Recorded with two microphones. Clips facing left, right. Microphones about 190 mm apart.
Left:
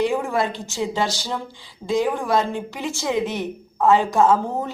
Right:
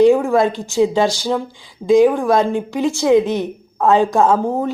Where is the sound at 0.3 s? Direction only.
15° right (ahead or behind).